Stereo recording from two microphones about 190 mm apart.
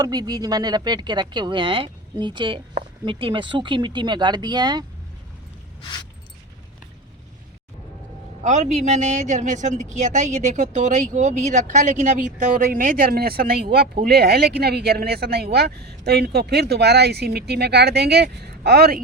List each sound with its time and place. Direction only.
0.0 s speech: 20° right (ahead or behind)
8.4 s speech: 40° right (ahead or behind); by 18.9 s 60° right (ahead or behind)